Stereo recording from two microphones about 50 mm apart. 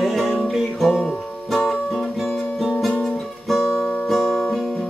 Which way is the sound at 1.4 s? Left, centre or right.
Centre.